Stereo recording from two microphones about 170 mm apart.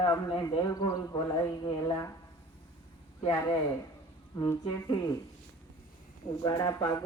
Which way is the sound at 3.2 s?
20° left (ahead or behind).